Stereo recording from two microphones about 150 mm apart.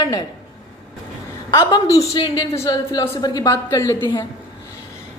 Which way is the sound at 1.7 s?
25° left (ahead or behind).